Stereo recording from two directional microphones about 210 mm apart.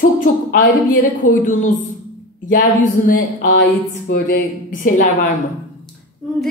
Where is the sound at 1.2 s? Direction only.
40° left (ahead or behind).